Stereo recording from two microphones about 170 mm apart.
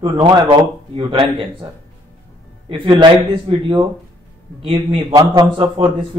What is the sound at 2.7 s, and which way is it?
A man's voice, 30° right (ahead or behind).